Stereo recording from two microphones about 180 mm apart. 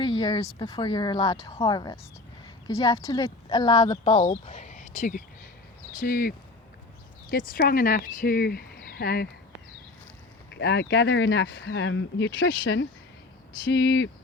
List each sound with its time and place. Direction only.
0.0 s a sound: 25° left (ahead or behind)
0.6 s speech: 25° left (ahead or behind)
4.3 s speech: 40° left (ahead or behind); by 9.3 s 60° left (ahead or behind)
10.5 s speech: 70° left (ahead or behind); by 12.9 s 90° left
13.7 s speech: 70° left (ahead or behind)